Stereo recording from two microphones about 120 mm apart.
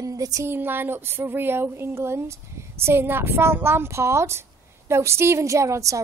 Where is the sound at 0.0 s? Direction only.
30° right (ahead or behind).